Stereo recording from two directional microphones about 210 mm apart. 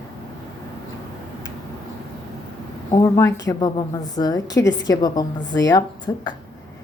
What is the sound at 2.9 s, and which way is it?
A woman's voice, 15° left (ahead or behind).